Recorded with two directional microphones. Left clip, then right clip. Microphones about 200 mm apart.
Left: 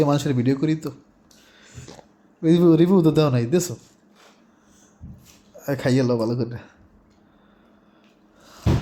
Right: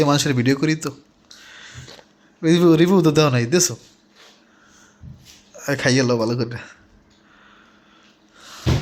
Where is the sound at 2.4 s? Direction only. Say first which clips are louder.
Right 2 dB; 5° left (ahead or behind).